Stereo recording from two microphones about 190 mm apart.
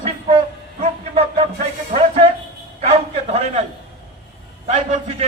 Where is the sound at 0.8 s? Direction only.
30° right (ahead or behind).